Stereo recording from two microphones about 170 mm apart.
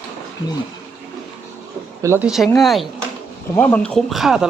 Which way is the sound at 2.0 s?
15° right (ahead or behind).